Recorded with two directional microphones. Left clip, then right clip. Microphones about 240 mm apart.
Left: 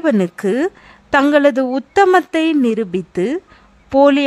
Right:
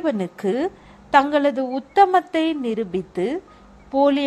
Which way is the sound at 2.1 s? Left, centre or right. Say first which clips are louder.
Left 6 dB; left.